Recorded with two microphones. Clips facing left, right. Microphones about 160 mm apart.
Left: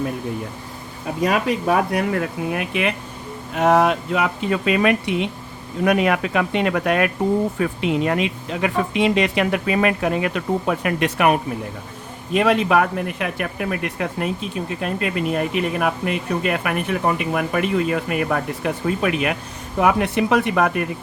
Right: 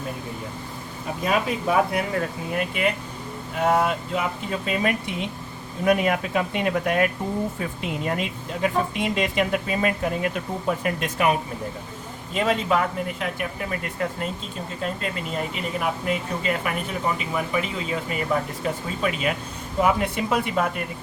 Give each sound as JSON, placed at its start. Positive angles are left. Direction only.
{"t": 1.2, "sound": "speech", "side_deg": 70}